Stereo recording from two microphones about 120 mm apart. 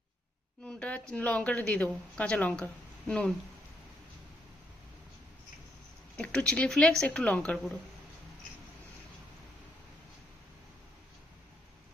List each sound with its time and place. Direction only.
0.6 s speech: 10° left (ahead or behind)
6.1 s speech: 10° left (ahead or behind)